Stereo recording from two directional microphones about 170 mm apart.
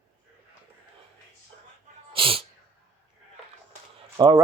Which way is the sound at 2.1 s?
30° right (ahead or behind).